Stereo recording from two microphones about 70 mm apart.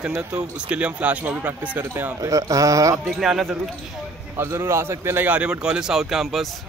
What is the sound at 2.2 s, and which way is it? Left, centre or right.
Speech, right.